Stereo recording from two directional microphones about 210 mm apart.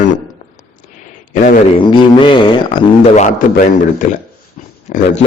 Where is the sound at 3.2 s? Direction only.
35° left (ahead or behind).